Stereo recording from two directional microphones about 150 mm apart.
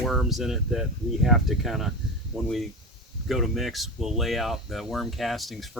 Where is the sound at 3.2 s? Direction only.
Centre (ahead or behind).